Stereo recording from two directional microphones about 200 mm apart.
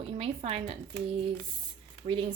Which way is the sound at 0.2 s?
30° right (ahead or behind).